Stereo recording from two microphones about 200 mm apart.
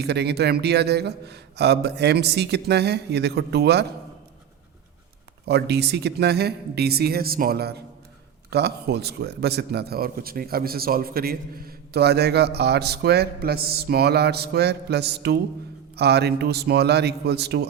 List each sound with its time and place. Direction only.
0.0 s a man's voice: 55° right (ahead or behind)
5.5 s a man's voice: 55° right (ahead or behind)